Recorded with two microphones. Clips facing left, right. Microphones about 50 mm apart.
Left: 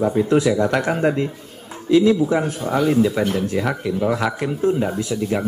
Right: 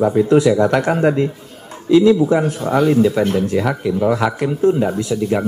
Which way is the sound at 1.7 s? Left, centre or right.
Centre.